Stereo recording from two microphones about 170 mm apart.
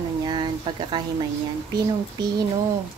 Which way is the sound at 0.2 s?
25° right (ahead or behind).